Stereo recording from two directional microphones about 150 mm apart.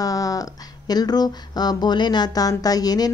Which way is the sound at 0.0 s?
25° left (ahead or behind).